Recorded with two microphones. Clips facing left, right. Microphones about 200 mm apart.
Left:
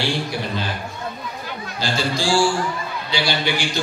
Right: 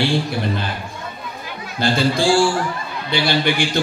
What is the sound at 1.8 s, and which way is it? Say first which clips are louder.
A man's voice: right 6 dB; 55° right (ahead or behind).